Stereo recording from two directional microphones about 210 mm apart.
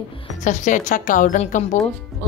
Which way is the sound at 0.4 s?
35° left (ahead or behind).